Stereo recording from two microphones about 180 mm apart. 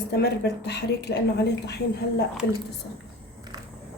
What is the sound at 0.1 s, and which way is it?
A woman's voice, 65° left (ahead or behind).